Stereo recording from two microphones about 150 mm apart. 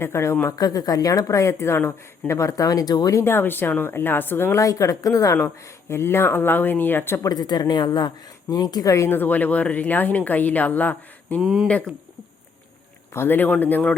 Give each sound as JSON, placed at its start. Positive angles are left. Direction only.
{"t": 0.0, "sound": "speech", "side_deg": 20}
{"t": 11.3, "sound": "speech", "side_deg": -5}
{"t": 13.1, "sound": "speech", "side_deg": 15}